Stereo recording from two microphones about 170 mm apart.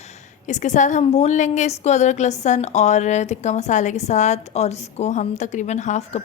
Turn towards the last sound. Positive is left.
turn(degrees=45)  # may be behind; listen again after turning